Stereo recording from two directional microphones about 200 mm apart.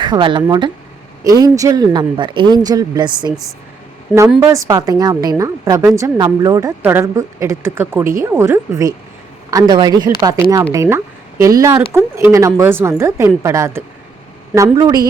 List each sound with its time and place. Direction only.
0.0 s speech: 25° right (ahead or behind)
4.4 s a woman's voice: 15° right (ahead or behind)